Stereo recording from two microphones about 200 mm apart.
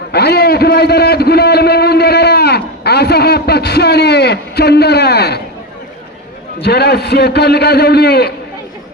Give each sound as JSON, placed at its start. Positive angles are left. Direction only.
{"t": 0.1, "sound": "a man's voice", "side_deg": 55}
{"t": 6.6, "sound": "a man's voice", "side_deg": 55}